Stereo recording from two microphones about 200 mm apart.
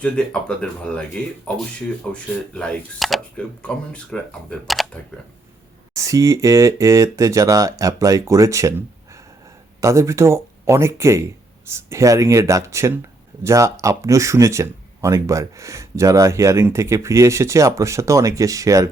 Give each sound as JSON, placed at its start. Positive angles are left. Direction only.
{"t": 0.0, "sound": "speech", "side_deg": 5}
{"t": 5.9, "sound": "speech", "side_deg": -15}
{"t": 9.8, "sound": "speech", "side_deg": -15}